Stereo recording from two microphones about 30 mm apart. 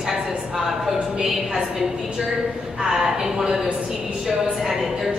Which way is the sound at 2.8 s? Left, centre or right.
Centre.